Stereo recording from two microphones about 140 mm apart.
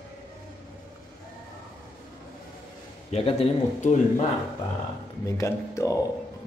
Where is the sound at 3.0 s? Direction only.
45° left (ahead or behind).